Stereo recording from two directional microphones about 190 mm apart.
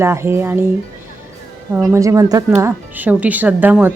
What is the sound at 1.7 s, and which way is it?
Speech, 10° right (ahead or behind).